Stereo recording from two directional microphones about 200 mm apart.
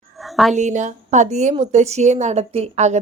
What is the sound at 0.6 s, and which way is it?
A woman's voice, 35° right (ahead or behind).